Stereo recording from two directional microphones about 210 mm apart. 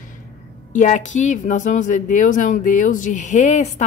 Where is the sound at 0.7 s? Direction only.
35° left (ahead or behind).